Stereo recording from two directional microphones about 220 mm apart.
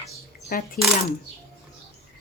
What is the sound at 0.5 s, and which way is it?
Speech, 40° left (ahead or behind).